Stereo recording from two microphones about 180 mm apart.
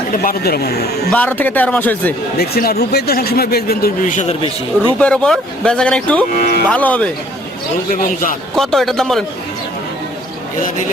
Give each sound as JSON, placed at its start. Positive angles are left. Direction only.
{"t": 0.2, "sound": "a man's voice", "side_deg": 55}
{"t": 1.1, "sound": "a man's voice", "side_deg": 10}
{"t": 2.4, "sound": "a man's voice", "side_deg": 60}
{"t": 4.9, "sound": "speech", "side_deg": 5}
{"t": 6.3, "sound": "a man's voice", "side_deg": 50}
{"t": 6.7, "sound": "a man's voice", "side_deg": 10}
{"t": 7.9, "sound": "a man's voice", "side_deg": 50}
{"t": 8.5, "sound": "speech", "side_deg": 0}